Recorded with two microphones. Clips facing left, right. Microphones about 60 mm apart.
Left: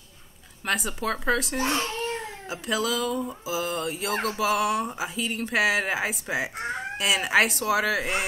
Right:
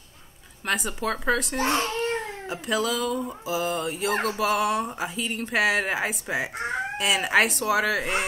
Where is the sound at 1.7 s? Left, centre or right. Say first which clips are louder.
Right 5 dB; right.